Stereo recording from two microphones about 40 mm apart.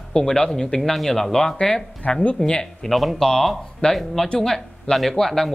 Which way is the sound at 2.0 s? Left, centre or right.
Left.